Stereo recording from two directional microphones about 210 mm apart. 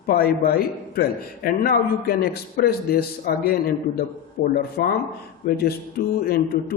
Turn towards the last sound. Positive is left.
turn(degrees=45)  # may be behind; listen again after turning